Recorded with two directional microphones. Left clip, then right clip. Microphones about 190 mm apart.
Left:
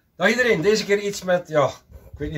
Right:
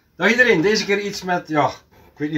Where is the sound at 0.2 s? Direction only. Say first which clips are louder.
Right 4 dB; 10° left (ahead or behind).